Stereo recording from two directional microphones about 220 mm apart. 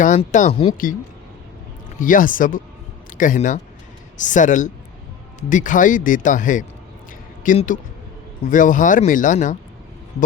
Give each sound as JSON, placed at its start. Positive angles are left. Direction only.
{"t": 0.0, "sound": "speech", "side_deg": 35}
{"t": 2.0, "sound": "speech", "side_deg": 35}